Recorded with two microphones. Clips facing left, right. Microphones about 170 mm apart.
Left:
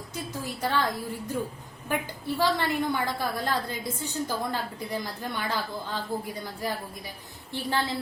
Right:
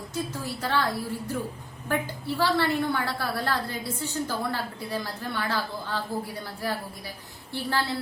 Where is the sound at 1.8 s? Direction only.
20° left (ahead or behind).